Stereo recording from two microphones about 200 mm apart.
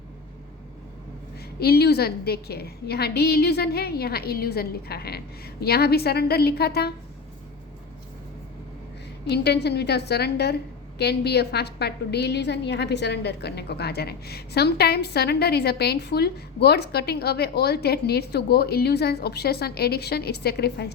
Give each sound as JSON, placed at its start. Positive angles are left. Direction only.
{"t": 1.5, "sound": "a woman's voice", "side_deg": 50}
{"t": 9.3, "sound": "a woman's voice", "side_deg": 55}